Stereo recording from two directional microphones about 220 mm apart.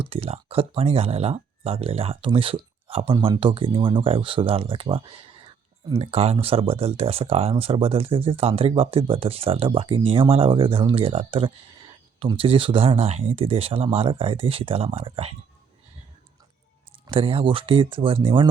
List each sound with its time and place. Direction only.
0.0 s speech: 25° right (ahead or behind)
17.1 s speech: 25° right (ahead or behind)